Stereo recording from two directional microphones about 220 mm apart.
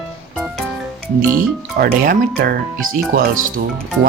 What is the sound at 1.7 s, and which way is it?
Speech, 40° right (ahead or behind).